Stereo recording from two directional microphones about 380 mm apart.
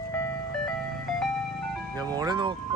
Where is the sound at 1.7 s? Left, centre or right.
Centre.